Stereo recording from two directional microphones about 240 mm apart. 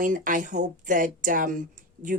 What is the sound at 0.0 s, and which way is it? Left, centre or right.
A woman's voice, right.